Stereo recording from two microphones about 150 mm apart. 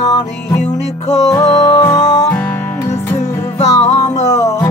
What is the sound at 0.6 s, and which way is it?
Music, 50° left (ahead or behind).